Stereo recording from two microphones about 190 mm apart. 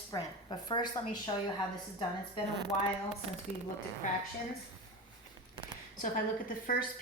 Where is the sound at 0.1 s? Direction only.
20° left (ahead or behind).